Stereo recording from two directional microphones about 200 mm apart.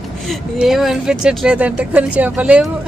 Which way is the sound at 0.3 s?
Centre (ahead or behind).